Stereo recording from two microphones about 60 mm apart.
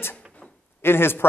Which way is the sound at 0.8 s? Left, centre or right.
Left.